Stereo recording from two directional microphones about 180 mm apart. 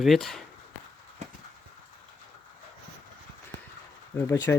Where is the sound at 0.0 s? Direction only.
Centre (ahead or behind).